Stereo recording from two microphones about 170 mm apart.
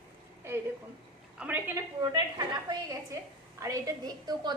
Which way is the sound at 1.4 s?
10° right (ahead or behind).